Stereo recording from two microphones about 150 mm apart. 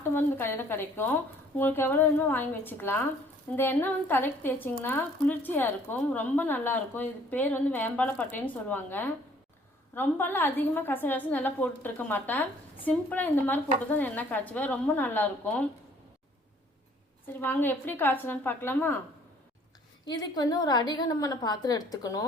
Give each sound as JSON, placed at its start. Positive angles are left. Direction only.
{"t": 0.1, "sound": "a woman's voice", "side_deg": 15}
{"t": 17.2, "sound": "a woman's voice", "side_deg": 15}
{"t": 20.1, "sound": "a woman's voice", "side_deg": 30}